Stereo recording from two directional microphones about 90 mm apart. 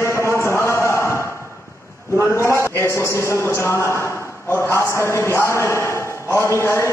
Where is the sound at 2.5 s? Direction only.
30° left (ahead or behind).